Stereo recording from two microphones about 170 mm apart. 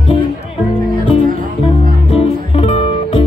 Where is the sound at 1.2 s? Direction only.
55° right (ahead or behind).